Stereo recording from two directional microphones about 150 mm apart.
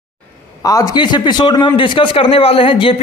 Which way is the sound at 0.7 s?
25° left (ahead or behind).